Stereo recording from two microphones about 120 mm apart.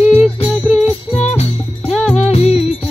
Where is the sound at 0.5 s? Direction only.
10° right (ahead or behind).